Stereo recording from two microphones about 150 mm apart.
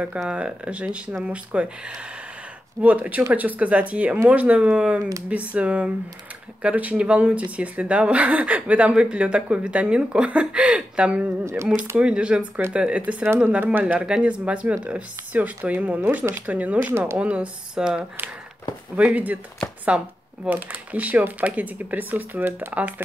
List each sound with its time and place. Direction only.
0.0 s speech: 5° right (ahead or behind)
11.4 s speech: 20° right (ahead or behind)
12.0 s speech: 5° right (ahead or behind)